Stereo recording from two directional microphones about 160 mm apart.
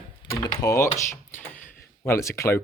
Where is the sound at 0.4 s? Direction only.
20° left (ahead or behind).